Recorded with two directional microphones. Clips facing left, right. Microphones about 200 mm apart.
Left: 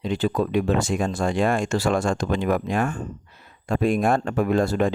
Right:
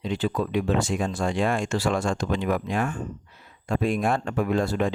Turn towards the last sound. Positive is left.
turn(degrees=45)  # may be behind; listen again after turning